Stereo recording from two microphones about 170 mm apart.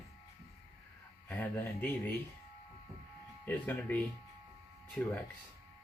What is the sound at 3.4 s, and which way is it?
Speech, 10° left (ahead or behind).